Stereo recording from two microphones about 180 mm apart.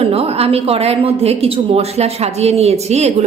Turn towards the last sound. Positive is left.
turn(degrees=-35)  # may be behind; listen again after turning